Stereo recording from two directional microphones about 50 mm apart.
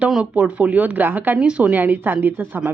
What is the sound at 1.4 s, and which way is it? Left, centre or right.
Speech, right.